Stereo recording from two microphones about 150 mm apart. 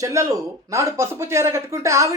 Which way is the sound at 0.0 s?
20° right (ahead or behind).